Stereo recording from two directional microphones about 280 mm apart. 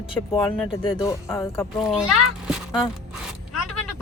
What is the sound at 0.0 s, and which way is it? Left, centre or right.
Speech, centre.